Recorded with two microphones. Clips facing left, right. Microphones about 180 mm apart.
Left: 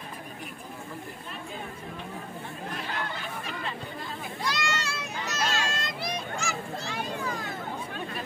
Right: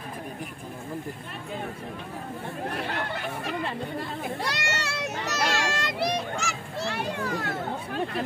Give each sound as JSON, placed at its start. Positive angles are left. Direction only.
{"t": 2.7, "sound": "chatter", "side_deg": -60}
{"t": 4.2, "sound": "children playing", "side_deg": -65}